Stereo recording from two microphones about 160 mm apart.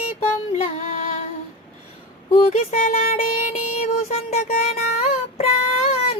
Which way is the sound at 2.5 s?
55° left (ahead or behind).